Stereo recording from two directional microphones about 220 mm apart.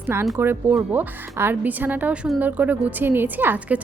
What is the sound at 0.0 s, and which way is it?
Speech, 10° right (ahead or behind).